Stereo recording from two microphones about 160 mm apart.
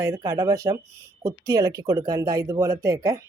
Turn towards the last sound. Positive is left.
turn(degrees=-20)  # may be behind; listen again after turning